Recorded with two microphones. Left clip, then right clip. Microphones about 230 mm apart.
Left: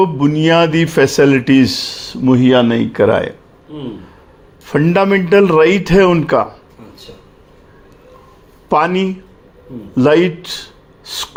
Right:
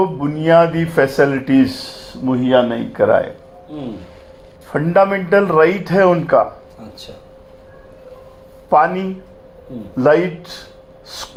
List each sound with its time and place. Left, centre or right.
0.2 s a man's voice: left
4.7 s a man's voice: left
8.7 s a man's voice: left
11.0 s gasp: left